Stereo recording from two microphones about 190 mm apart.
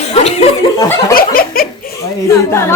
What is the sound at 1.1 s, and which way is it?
Speech, 50° left (ahead or behind).